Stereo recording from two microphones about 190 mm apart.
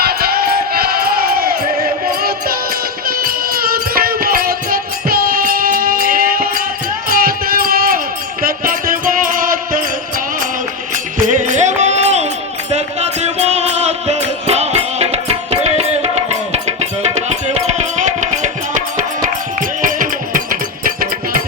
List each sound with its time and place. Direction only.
0.0 s music: 55° right (ahead or behind)
3.1 s music: 50° right (ahead or behind)
10.9 s music: 40° right (ahead or behind)